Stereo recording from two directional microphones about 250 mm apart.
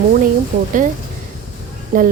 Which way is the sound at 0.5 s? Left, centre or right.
Right.